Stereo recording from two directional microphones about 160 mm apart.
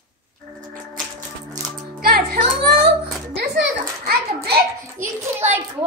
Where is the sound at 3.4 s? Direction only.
80° right.